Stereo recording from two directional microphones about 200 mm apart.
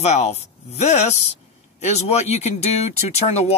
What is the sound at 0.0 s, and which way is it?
Speech, 35° left (ahead or behind).